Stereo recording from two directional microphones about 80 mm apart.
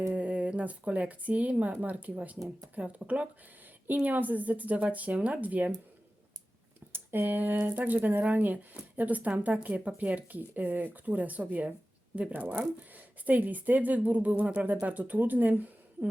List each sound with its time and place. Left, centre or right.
0.1 s speech: centre
6.9 s speech: right